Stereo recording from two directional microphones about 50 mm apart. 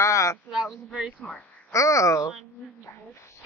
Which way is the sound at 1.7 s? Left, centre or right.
Left.